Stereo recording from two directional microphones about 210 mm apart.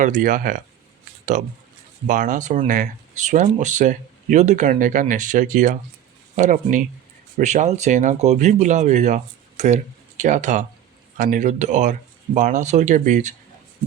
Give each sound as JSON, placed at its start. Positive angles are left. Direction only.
{"t": 0.0, "sound": "speech", "side_deg": -40}